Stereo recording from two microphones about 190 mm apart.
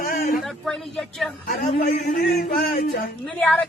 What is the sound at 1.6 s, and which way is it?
Speech, 50° left (ahead or behind).